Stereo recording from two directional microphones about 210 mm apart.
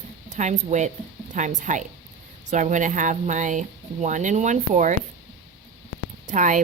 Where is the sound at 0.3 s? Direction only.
35° right (ahead or behind).